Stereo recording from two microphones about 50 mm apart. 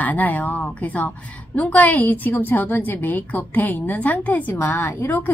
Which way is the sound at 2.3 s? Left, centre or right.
Left.